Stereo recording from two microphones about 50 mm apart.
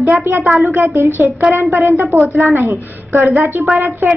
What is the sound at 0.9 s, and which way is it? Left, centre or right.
Speech, right.